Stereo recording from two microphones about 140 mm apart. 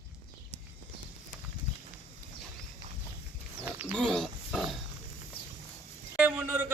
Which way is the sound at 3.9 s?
5° left (ahead or behind).